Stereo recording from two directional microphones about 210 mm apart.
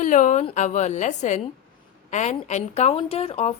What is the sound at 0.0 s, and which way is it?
Speech, 35° left (ahead or behind).